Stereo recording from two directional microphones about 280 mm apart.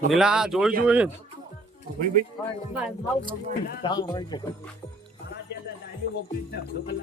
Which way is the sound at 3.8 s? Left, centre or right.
Centre.